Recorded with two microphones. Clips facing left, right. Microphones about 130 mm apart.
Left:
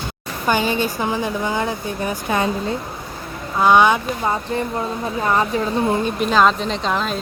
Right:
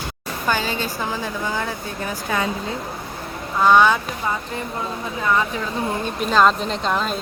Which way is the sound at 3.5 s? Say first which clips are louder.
Left 1 dB; 15° left (ahead or behind).